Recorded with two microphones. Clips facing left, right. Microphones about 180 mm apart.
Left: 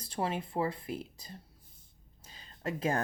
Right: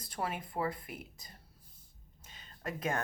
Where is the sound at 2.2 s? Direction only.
30° left (ahead or behind).